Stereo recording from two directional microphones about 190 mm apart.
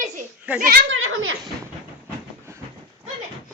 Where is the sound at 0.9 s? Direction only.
90° right.